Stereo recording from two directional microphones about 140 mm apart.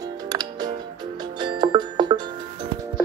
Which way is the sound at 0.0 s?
30° right (ahead or behind).